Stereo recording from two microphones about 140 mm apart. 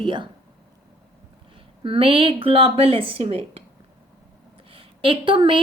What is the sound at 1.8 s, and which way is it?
Speech, 40° right (ahead or behind).